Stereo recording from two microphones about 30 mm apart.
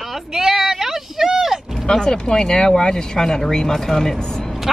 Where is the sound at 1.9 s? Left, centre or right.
Left.